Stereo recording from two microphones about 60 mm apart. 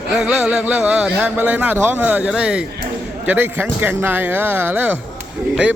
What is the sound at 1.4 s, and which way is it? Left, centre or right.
Speech, right.